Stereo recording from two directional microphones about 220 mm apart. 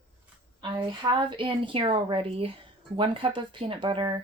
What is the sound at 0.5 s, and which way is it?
A woman's voice, 20° right (ahead or behind).